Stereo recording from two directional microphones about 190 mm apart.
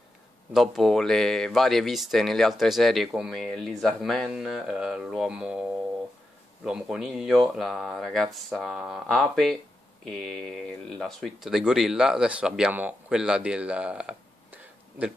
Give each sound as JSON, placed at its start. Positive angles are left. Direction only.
{"t": 0.5, "sound": "speech", "side_deg": 0}